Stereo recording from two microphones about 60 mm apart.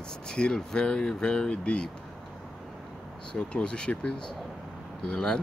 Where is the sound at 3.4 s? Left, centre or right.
Centre.